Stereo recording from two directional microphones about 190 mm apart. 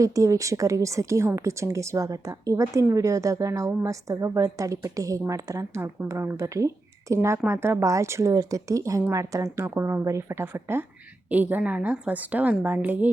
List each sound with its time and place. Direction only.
0.0 s speech: 15° right (ahead or behind)